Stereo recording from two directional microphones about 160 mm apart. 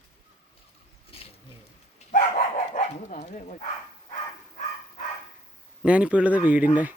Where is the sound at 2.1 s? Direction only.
50° left (ahead or behind).